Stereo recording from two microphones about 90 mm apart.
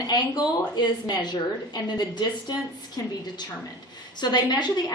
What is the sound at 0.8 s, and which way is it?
A woman's voice, 55° left (ahead or behind).